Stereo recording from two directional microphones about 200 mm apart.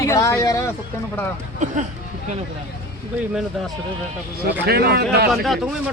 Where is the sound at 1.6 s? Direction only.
35° right (ahead or behind).